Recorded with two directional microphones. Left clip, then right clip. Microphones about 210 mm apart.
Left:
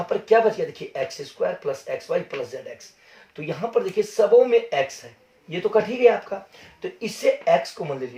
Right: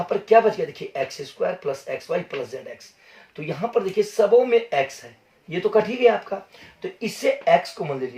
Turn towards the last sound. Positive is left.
turn(degrees=10)  # may be behind; listen again after turning